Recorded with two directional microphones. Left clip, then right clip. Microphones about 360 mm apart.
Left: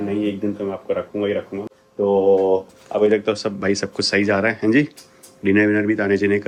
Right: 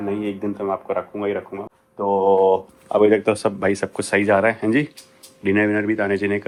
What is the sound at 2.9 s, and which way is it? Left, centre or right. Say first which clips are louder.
Speech: right 2 dB; centre.